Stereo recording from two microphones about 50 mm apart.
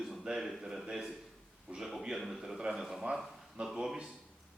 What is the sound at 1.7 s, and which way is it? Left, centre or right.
Speech, centre.